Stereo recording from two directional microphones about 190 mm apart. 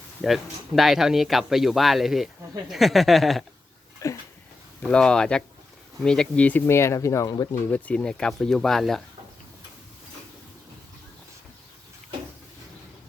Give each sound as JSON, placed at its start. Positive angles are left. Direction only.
{"t": 0.2, "sound": "speech", "side_deg": 0}
{"t": 4.0, "sound": "a sound", "side_deg": 15}
{"t": 4.8, "sound": "speech", "side_deg": 5}
{"t": 7.7, "sound": "speech", "side_deg": 5}